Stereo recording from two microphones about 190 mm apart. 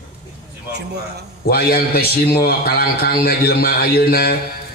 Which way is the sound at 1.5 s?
55° left (ahead or behind).